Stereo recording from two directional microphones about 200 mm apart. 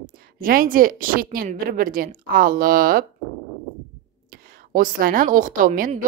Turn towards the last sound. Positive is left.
turn(degrees=-45)  # may be behind; listen again after turning